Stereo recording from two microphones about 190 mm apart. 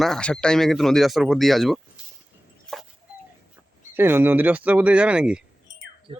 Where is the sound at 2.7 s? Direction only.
Centre (ahead or behind).